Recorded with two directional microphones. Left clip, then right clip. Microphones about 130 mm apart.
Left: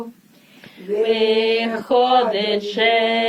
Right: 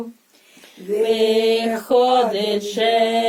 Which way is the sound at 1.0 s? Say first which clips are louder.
Even; 40° right (ahead or behind).